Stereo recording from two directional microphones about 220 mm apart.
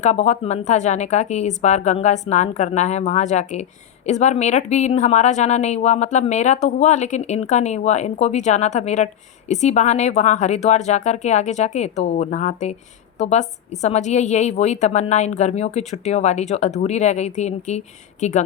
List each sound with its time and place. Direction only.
0.0 s a woman's voice: 30° left (ahead or behind)